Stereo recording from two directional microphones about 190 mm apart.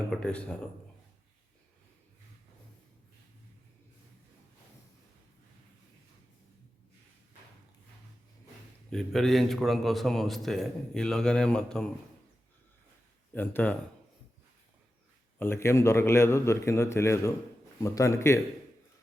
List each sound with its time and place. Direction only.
0.1 s a man's voice: 5° left (ahead or behind)
8.9 s a man's voice: centre (ahead or behind)
13.3 s a man's voice: 10° left (ahead or behind)
15.4 s a man's voice: 15° left (ahead or behind)